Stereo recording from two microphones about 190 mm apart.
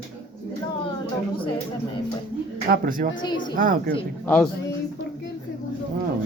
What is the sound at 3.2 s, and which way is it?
Speech, 25° left (ahead or behind).